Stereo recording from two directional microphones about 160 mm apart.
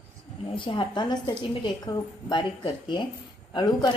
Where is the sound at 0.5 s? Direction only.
30° left (ahead or behind).